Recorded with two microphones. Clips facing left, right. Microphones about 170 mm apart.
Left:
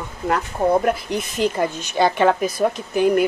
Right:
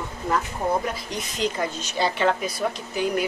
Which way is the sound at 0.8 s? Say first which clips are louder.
Left 8 dB; 55° left (ahead or behind).